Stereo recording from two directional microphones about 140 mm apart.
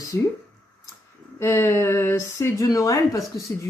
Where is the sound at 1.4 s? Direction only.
15° left (ahead or behind).